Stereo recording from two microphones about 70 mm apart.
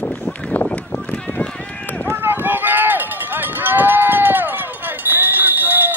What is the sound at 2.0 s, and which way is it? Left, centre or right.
Run, right.